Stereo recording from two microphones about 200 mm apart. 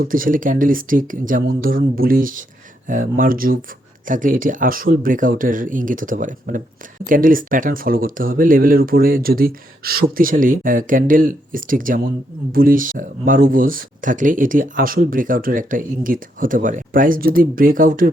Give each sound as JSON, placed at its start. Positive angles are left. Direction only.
{"t": 0.0, "sound": "speech", "side_deg": -45}